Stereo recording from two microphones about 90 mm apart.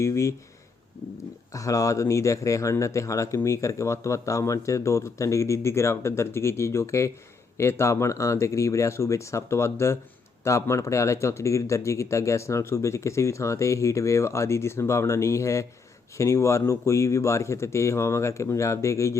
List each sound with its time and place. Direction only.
0.0 s speech: 35° left (ahead or behind)
1.5 s speech: 40° left (ahead or behind)